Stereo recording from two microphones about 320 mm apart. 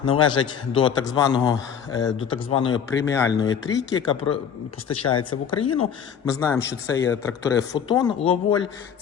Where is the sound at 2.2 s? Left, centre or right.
Left.